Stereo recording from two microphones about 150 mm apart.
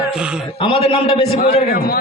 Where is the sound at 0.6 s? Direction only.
35° left (ahead or behind).